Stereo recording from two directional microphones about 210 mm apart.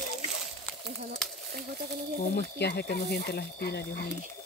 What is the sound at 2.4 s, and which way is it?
Speech, 50° left (ahead or behind).